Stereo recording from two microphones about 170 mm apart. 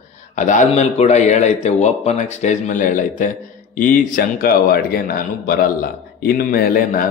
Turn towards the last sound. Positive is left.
turn(degrees=60)  # may be behind; listen again after turning